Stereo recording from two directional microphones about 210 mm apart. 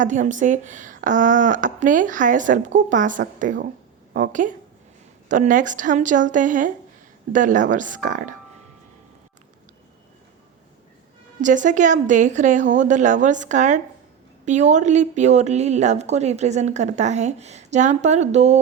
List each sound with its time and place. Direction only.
0.0 s a woman's voice: 35° right (ahead or behind)
11.3 s a woman's voice: 35° right (ahead or behind)